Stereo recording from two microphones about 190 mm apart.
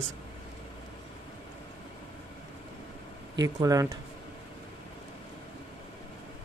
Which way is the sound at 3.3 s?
20° right (ahead or behind).